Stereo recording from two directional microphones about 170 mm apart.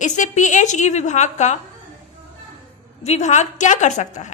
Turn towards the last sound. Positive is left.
turn(degrees=45)  # may be behind; listen again after turning